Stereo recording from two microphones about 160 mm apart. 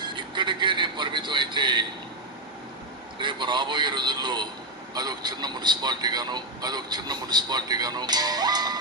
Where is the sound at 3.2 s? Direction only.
30° right (ahead or behind).